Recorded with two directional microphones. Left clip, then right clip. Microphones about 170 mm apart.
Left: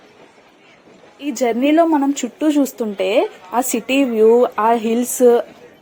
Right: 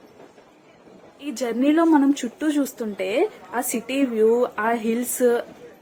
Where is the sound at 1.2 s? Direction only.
25° left (ahead or behind).